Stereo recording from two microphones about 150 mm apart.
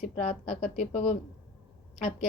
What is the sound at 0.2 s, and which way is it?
Speech, 45° left (ahead or behind).